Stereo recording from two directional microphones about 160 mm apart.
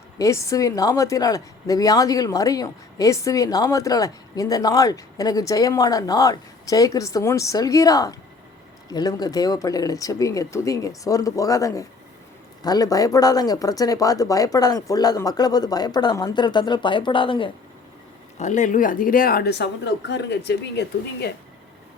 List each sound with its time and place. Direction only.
0.2 s a woman's voice: 20° left (ahead or behind)
18.3 s speech: 50° left (ahead or behind); by 21.3 s 90° left